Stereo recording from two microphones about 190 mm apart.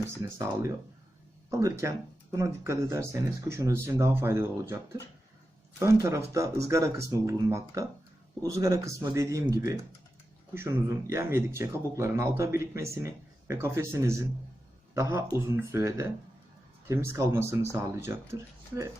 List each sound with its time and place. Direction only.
0.2 s speech: 15° right (ahead or behind)
15.7 s speech: 15° right (ahead or behind)